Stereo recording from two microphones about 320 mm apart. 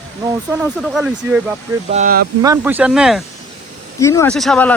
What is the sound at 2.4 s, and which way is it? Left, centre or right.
Speech, centre.